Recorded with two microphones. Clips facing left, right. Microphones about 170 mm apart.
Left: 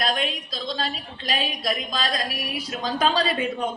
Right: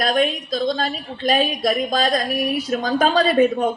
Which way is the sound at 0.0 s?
50° right (ahead or behind).